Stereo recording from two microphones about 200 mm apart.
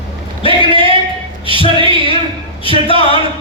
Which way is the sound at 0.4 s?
25° left (ahead or behind).